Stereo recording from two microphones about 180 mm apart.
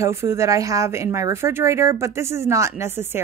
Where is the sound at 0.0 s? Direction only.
15° right (ahead or behind).